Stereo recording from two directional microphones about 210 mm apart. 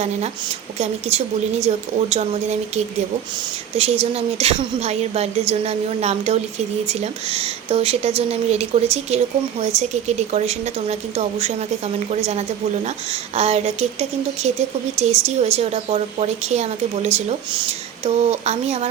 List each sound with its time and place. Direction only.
0.8 s a woman's voice: 30° right (ahead or behind)